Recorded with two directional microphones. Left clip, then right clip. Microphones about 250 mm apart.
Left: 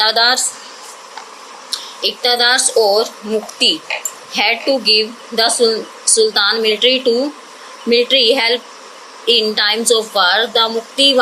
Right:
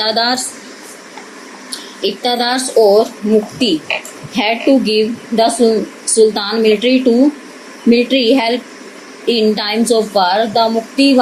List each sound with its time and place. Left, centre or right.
0.0 s speech: left
2.0 s speech: left